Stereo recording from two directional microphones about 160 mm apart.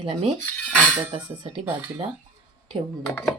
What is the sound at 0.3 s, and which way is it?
Cutlery, 5° left (ahead or behind).